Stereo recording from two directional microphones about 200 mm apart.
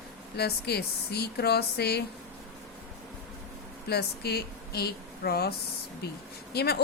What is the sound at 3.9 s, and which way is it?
Speech, 55° left (ahead or behind).